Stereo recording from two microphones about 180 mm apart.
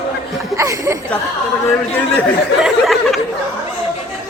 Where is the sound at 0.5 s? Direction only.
20° right (ahead or behind).